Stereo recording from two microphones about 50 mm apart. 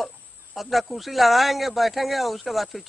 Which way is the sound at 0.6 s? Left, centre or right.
Centre.